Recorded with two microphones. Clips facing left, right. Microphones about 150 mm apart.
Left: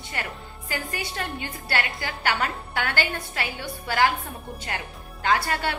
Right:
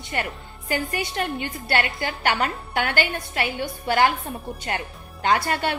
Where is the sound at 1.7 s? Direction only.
25° right (ahead or behind).